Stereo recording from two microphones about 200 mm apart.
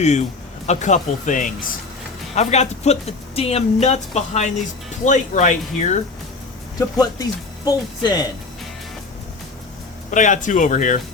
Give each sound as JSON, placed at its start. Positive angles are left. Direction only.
{"t": 0.0, "sound": "speech", "side_deg": 35}
{"t": 6.7, "sound": "speech", "side_deg": 20}
{"t": 10.1, "sound": "speech", "side_deg": 40}